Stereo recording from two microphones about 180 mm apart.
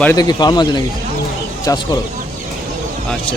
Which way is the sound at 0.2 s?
20° left (ahead or behind).